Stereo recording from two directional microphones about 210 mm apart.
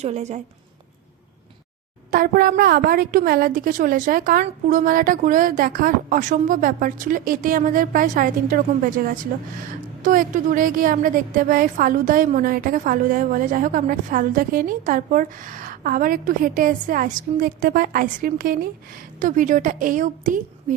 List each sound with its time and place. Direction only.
0.0 s a woman's voice: 30° right (ahead or behind)
2.0 s a woman's voice: 40° right (ahead or behind)